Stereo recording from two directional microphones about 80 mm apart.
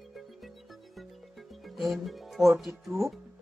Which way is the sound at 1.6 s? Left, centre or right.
Centre.